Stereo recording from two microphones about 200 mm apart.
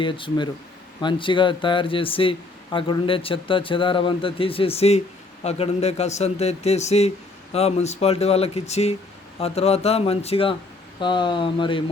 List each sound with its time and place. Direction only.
0.0 s speech: 25° left (ahead or behind)